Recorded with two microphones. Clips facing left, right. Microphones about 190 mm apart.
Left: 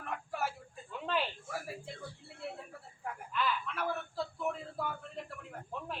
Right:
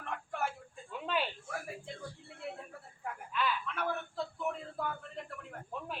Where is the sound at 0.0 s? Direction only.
5° left (ahead or behind).